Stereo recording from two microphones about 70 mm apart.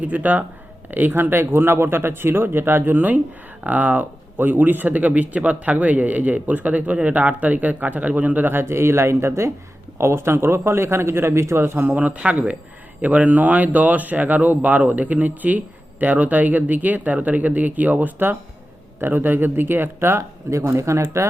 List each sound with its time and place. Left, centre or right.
0.0 s speech: right
11.9 s speech: right